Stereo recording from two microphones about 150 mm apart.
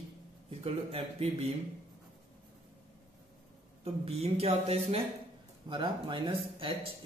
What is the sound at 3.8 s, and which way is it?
Speech, 45° right (ahead or behind).